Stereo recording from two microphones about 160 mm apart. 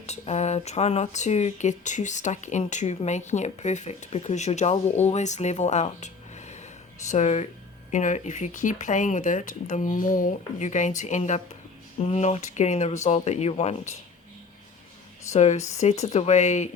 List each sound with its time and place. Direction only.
0.0 s speech: 45° left (ahead or behind)
15.3 s speech: 45° left (ahead or behind)